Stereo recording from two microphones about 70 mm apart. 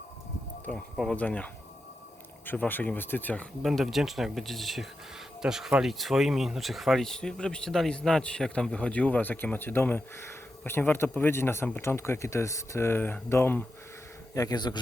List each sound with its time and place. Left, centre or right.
0.7 s speech: centre
1.1 s speech: left
2.5 s speech: left
3.6 s speech: centre; by 13.7 s left
14.3 s a man's voice: left